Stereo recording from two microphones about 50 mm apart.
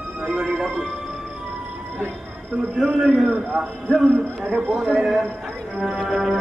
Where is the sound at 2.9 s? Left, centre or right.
Centre.